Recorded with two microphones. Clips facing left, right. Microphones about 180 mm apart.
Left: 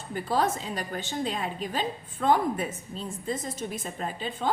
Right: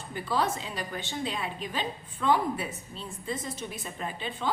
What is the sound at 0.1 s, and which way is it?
A woman's voice, 45° left (ahead or behind).